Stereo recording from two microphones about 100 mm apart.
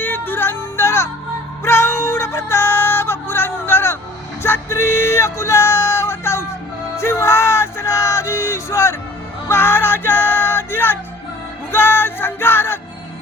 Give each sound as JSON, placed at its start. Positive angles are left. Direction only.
{"t": 0.0, "sound": "music", "side_deg": 20}